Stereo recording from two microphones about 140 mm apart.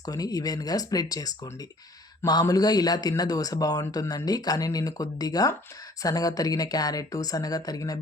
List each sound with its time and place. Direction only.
0.0 s a man's voice: 25° left (ahead or behind)